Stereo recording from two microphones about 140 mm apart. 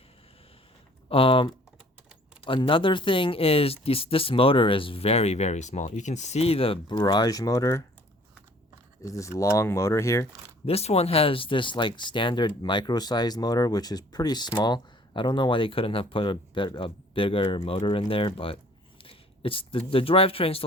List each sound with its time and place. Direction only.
1.1 s speech: 40° left (ahead or behind)
7.0 s speech: 30° left (ahead or behind)
9.0 s speech: 20° left (ahead or behind)
10.7 s speech: 45° left (ahead or behind)